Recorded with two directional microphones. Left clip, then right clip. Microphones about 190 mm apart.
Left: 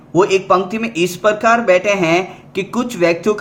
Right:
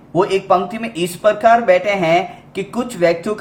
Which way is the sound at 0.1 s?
15° left (ahead or behind).